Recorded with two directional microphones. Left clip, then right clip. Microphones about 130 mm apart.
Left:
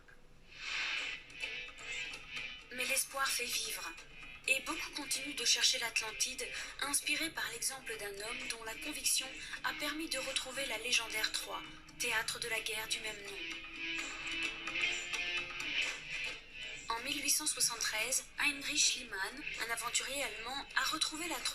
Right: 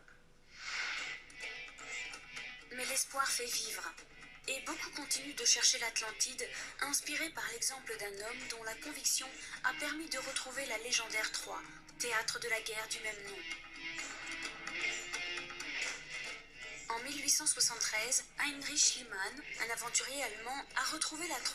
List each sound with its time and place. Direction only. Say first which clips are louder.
0.6 s music: left 2 dB; 45° right (ahead or behind)
3.7 s a woman's voice: even; 40° right (ahead or behind)
12.7 s music: left 1 dB; 45° right (ahead or behind)
17.5 s a woman's voice: right 1 dB; 45° right (ahead or behind)